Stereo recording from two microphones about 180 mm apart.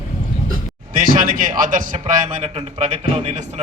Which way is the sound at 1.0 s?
50° right (ahead or behind).